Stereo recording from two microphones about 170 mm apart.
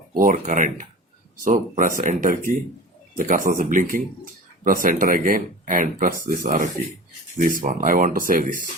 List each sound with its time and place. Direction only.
0.1 s speech: 50° right (ahead or behind)